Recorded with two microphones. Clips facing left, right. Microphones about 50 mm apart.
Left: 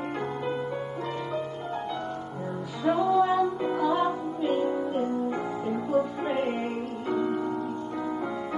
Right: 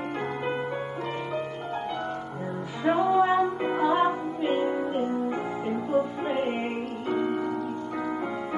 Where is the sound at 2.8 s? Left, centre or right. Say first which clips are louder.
Right 1 dB; right.